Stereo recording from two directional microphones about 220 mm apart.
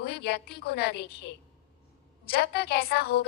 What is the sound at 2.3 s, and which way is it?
Speech, 45° left (ahead or behind).